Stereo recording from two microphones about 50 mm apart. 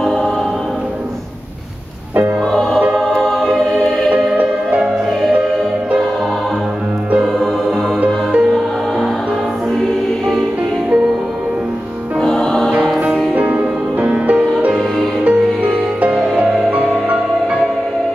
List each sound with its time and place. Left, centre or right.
0.0 s choir: centre
3.1 s choir: centre
8.0 s music: right
12.2 s music: centre
13.3 s music: right
14.7 s music: centre
15.2 s music: right